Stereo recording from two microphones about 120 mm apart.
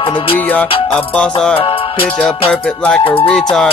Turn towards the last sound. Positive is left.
turn(degrees=5)  # may be behind; listen again after turning